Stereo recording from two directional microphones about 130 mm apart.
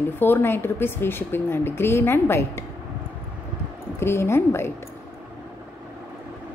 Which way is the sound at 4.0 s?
20° left (ahead or behind).